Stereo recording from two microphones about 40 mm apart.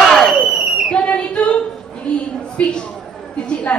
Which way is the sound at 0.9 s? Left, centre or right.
Left.